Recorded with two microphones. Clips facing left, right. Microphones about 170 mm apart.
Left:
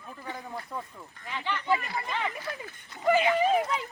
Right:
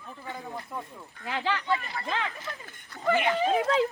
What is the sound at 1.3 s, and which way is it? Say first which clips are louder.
Speech: right 4 dB; 90° right.